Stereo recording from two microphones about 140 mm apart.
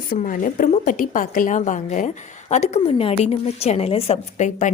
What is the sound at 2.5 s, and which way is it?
A woman's voice, 50° left (ahead or behind).